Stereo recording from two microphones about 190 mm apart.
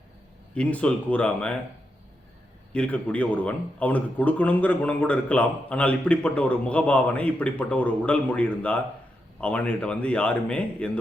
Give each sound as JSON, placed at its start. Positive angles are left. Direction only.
{"t": 0.5, "sound": "speech", "side_deg": 5}
{"t": 2.7, "sound": "speech", "side_deg": 5}